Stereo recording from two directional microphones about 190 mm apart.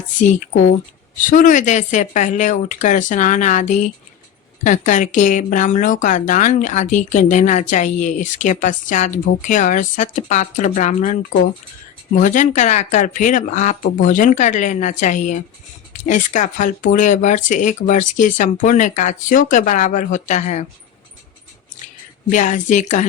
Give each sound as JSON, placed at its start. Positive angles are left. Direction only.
{"t": 0.2, "sound": "speech", "side_deg": 40}
{"t": 22.3, "sound": "speech", "side_deg": 40}